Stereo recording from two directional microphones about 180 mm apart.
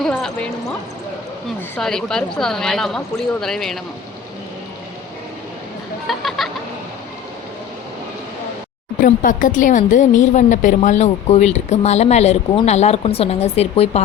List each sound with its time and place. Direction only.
0.0 s a sound: 5° left (ahead or behind)
1.7 s a woman's voice: 5° left (ahead or behind)
6.1 s a woman's voice: centre (ahead or behind)
9.0 s speech: 50° left (ahead or behind)